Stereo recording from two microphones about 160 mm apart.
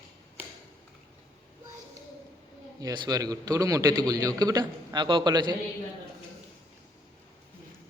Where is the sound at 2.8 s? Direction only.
25° right (ahead or behind).